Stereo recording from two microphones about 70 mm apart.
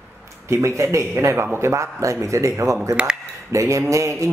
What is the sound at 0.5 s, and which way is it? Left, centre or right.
Speech, right.